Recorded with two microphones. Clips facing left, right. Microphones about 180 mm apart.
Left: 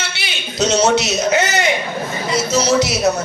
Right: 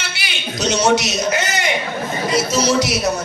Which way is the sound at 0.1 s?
25° left (ahead or behind).